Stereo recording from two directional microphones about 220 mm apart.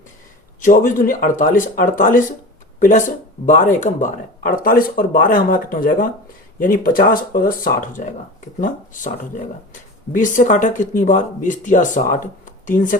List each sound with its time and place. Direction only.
0.6 s speech: 35° left (ahead or behind)